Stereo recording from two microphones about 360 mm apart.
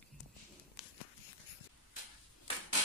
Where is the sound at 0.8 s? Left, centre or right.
Centre.